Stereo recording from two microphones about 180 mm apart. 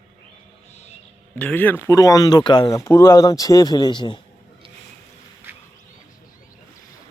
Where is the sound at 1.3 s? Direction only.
10° left (ahead or behind); by 4.2 s 25° left (ahead or behind).